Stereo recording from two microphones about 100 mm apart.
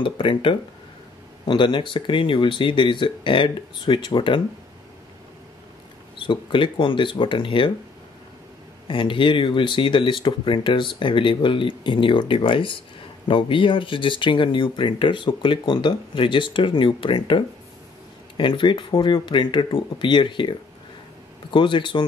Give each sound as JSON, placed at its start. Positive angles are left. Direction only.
{"t": 0.0, "sound": "speech", "side_deg": 55}
{"t": 6.1, "sound": "speech", "side_deg": 55}
{"t": 8.8, "sound": "speech", "side_deg": 60}